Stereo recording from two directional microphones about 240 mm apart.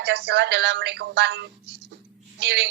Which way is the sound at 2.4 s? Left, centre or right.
Right.